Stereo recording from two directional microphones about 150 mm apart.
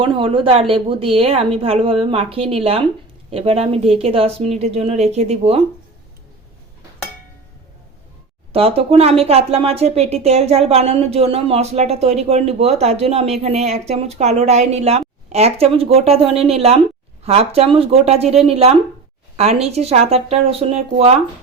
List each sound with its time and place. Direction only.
0.0 s a woman's voice: 35° right (ahead or behind)
8.5 s a woman's voice: 40° right (ahead or behind)